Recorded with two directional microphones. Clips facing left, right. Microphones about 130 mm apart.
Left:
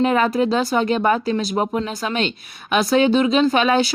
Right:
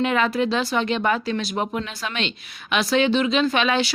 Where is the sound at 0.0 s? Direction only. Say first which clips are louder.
Left 4 dB; 35° left (ahead or behind).